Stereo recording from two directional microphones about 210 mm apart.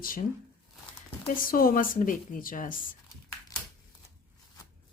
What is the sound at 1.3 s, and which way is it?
A woman's voice, 40° left (ahead or behind).